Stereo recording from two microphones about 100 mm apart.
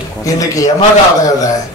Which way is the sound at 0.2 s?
35° left (ahead or behind).